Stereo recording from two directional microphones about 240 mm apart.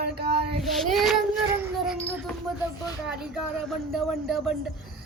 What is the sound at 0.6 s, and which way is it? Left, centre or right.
Child singing, centre.